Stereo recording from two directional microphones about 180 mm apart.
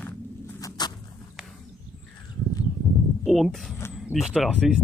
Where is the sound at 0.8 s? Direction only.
25° left (ahead or behind).